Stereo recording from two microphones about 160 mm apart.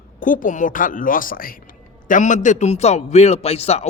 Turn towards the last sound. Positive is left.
turn(degrees=40)  # may be behind; listen again after turning